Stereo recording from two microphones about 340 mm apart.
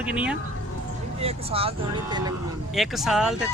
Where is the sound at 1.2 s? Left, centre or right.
Centre.